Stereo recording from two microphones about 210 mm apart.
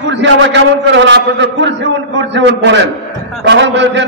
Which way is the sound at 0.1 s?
60° right (ahead or behind).